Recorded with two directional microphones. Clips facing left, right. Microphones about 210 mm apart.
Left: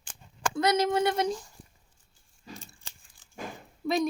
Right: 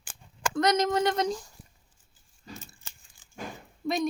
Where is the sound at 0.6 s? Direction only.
10° left (ahead or behind).